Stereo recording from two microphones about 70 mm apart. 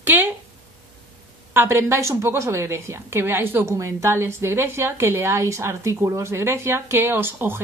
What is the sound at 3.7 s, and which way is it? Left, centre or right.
A woman's voice, right.